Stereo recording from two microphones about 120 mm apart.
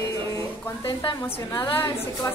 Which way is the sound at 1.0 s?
35° left (ahead or behind).